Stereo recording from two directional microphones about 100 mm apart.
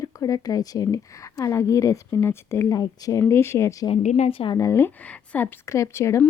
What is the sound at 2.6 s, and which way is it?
Speech, 40° left (ahead or behind).